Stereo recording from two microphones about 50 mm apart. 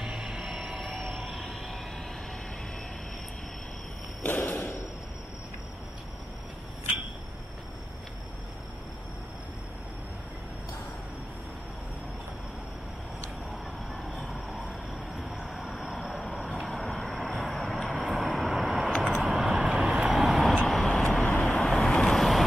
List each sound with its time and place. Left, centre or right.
0.0 s music: centre
0.7 s a sound: right
0.9 s a sound: centre
4.3 s thump: left
13.5 s vehicle: centre
14.3 s train: centre
15.5 s vehicle: centre
19.6 s vehicle: centre
20.5 s vehicle: centre